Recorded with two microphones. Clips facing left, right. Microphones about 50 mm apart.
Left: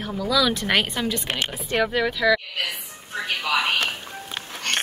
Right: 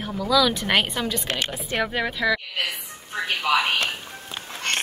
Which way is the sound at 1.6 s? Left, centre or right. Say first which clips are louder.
Left 4 dB; centre.